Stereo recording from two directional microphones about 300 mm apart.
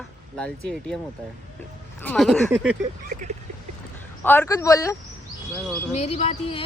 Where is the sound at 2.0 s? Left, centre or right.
Centre.